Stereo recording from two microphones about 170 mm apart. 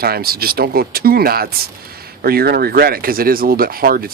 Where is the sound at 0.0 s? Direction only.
65° right (ahead or behind).